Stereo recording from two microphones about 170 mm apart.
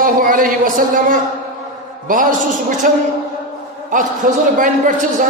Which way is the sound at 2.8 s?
50° right (ahead or behind).